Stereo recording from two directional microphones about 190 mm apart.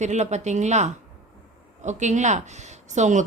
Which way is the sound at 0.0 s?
40° right (ahead or behind).